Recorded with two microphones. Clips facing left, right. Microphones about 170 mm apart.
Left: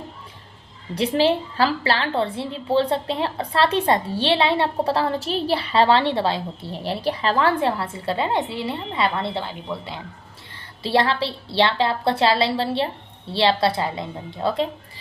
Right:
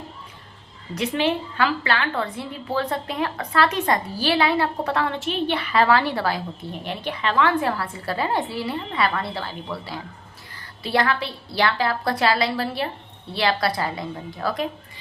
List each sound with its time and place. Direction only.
0.9 s a woman's voice: 35° left (ahead or behind)